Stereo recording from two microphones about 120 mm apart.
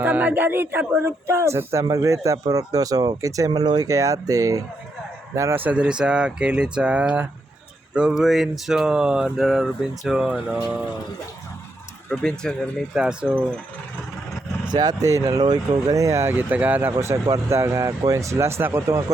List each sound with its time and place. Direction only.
0.0 s speech: 15° right (ahead or behind)
12.0 s speech: 5° left (ahead or behind)
12.9 s speech: 10° right (ahead or behind)
14.7 s speech: 35° right (ahead or behind)